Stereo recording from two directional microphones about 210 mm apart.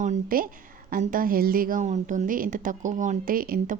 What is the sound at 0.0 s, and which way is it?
A woman's voice, 40° right (ahead or behind).